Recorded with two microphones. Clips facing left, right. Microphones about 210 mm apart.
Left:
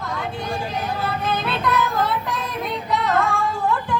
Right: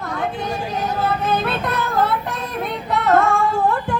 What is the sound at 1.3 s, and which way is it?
Music, 50° right (ahead or behind).